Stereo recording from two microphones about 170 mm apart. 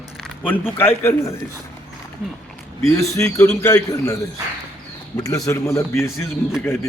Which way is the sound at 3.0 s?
15° left (ahead or behind).